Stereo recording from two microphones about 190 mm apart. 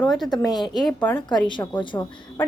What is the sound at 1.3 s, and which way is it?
Speech, 25° left (ahead or behind).